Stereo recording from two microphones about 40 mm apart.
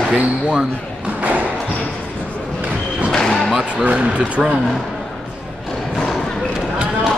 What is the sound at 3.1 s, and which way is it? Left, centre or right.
Basketball bounce, centre.